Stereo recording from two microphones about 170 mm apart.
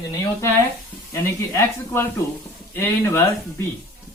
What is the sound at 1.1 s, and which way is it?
Speech, 15° left (ahead or behind).